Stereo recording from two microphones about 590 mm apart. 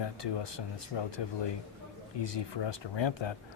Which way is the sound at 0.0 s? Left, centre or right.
Left.